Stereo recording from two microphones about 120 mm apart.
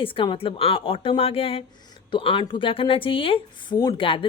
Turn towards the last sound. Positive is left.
turn(degrees=45)  # may be behind; listen again after turning